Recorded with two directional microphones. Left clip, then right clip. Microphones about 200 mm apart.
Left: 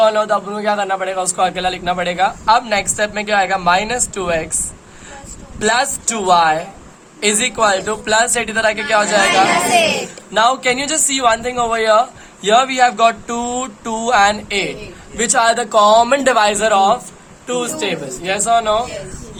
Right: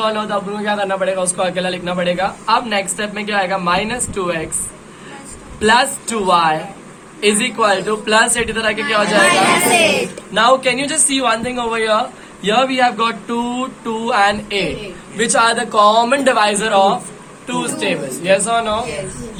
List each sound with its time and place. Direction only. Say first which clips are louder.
0.0 s speech: left 5 dB; 60° left (ahead or behind)
5.5 s speech: right 3 dB; 60° left (ahead or behind)